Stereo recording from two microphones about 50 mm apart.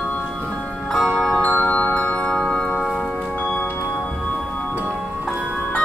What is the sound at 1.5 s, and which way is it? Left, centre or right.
Music, left.